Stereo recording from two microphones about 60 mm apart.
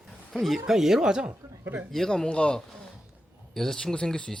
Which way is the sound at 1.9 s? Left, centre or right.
Centre.